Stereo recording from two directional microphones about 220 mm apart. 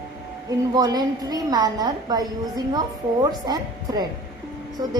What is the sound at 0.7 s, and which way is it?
A woman's voice, 15° right (ahead or behind).